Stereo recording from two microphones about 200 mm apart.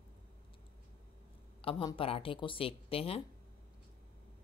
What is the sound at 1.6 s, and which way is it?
Speech, 25° left (ahead or behind).